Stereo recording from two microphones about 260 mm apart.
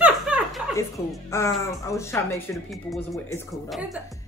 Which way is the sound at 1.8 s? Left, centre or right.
Centre.